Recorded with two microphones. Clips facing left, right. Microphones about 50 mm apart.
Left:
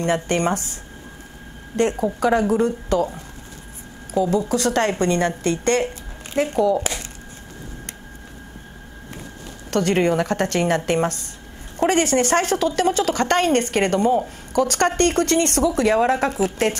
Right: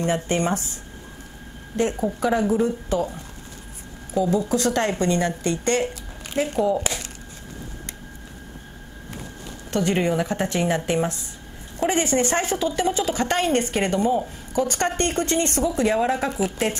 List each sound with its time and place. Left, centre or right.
0.0 s a woman's voice: left
1.8 s a woman's voice: left
4.1 s a woman's voice: left
9.7 s a woman's voice: left